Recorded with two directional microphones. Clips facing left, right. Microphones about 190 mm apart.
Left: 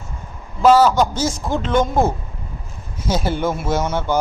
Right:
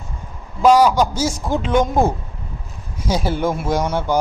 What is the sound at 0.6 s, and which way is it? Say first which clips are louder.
A man's voice: even; 15° right (ahead or behind).